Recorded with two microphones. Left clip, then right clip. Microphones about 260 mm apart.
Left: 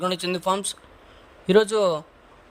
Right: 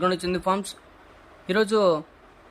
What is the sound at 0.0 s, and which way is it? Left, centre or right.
A man's voice, left.